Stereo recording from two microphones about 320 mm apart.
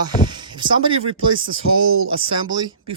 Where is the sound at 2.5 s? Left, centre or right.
Centre.